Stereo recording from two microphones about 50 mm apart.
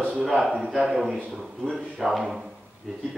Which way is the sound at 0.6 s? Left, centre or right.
Centre.